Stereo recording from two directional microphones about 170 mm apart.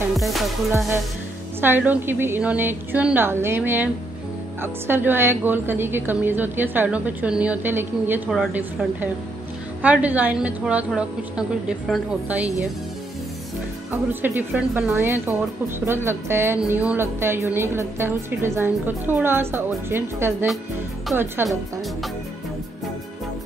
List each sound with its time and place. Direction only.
0.2 s music: centre (ahead or behind)
1.6 s a woman's voice: 10° right (ahead or behind)
9.8 s a woman's voice: 10° right (ahead or behind)
14.2 s a woman's voice: 10° right (ahead or behind)